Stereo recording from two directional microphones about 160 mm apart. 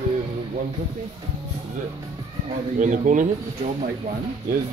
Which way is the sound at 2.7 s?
50° right (ahead or behind).